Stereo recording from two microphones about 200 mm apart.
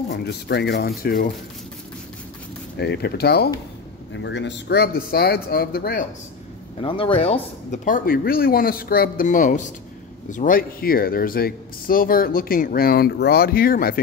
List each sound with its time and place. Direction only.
0.1 s speech: 55° left (ahead or behind)
2.8 s speech: 55° left (ahead or behind)
4.1 s speech: 65° left (ahead or behind); by 6.0 s 50° left (ahead or behind)
6.8 s speech: 25° left (ahead or behind); by 13.9 s 45° left (ahead or behind)